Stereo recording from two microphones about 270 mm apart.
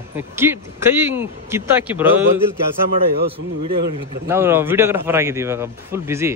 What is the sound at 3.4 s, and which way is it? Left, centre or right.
Speech, right.